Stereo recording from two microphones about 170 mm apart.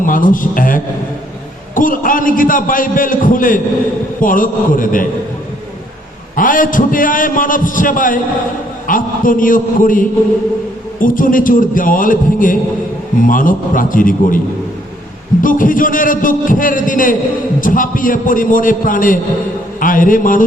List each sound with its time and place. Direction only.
0.0 s a man's voice: 55° left (ahead or behind)
6.3 s a man's voice: 50° left (ahead or behind)
15.4 s a man's voice: 50° left (ahead or behind)